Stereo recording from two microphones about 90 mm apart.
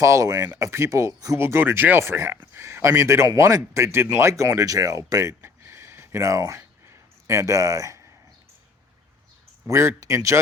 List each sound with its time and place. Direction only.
0.0 s speech: 35° right (ahead or behind)
5.4 s a sound: 30° right (ahead or behind)
6.6 s dog: 30° right (ahead or behind)
9.6 s speech: 35° right (ahead or behind)